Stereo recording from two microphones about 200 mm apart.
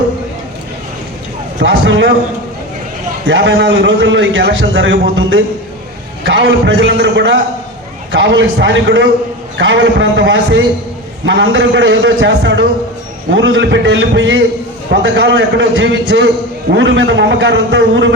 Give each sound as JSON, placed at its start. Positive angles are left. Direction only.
{"t": 1.6, "sound": "a man's voice", "side_deg": -65}
{"t": 3.2, "sound": "a man's voice", "side_deg": -65}